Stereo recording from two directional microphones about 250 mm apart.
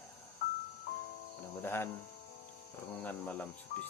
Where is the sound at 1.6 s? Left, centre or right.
Centre.